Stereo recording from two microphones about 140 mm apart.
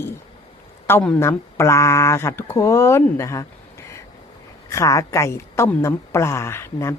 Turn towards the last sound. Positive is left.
turn(degrees=20)  # may be behind; listen again after turning